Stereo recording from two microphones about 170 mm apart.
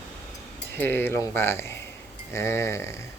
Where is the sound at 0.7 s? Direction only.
15° left (ahead or behind).